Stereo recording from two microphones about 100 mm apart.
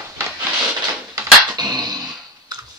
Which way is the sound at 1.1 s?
40° right (ahead or behind).